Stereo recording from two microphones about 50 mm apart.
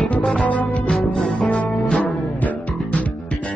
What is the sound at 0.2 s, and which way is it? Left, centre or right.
Music, centre.